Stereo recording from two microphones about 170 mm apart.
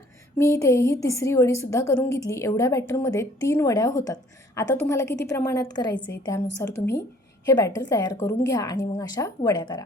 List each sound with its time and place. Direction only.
0.3 s a woman's voice: 20° left (ahead or behind)
5.0 s a woman's voice: 90° left
5.5 s a woman's voice: 20° left (ahead or behind)